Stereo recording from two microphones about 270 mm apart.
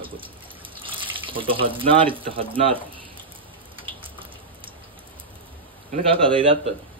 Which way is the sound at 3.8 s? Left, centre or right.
Centre.